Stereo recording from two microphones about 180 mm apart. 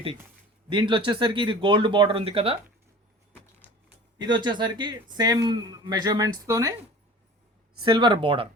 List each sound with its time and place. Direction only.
0.7 s speech: 25° right (ahead or behind)
4.2 s speech: 25° right (ahead or behind)
7.8 s speech: 25° right (ahead or behind)